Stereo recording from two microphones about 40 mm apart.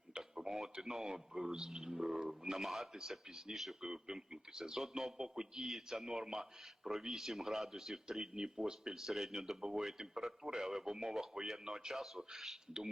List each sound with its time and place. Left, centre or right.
0.2 s a man's voice: centre
3.8 s a man's voice: centre
4.8 s a man's voice: centre